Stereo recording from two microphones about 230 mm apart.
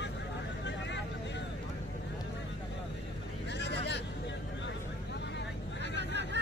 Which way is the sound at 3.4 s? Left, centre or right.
Left.